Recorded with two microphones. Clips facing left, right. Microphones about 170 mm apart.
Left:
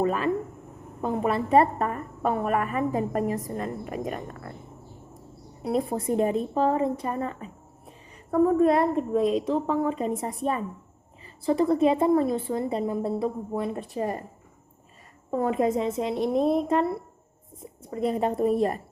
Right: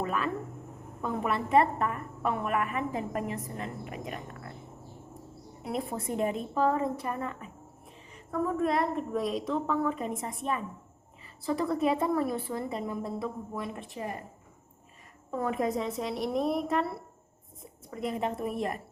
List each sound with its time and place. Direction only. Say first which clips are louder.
0.0 s a sound: left 6 dB; 35° left (ahead or behind)
1.0 s a woman's voice: left 5 dB; 30° left (ahead or behind)
5.6 s a woman's voice: left 7 dB; 35° left (ahead or behind)
15.3 s a woman's voice: left 6 dB; 30° left (ahead or behind)
17.9 s a woman's voice: left 7 dB; 35° left (ahead or behind)